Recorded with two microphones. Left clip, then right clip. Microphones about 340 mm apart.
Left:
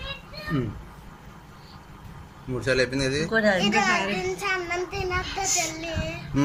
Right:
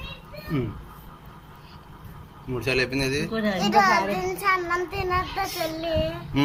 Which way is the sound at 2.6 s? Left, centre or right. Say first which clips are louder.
Left 1 dB; centre.